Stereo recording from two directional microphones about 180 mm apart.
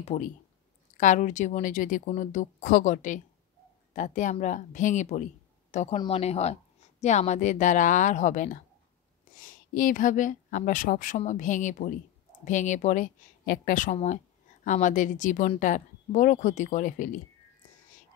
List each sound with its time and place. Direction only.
0.0 s speech: 40° left (ahead or behind)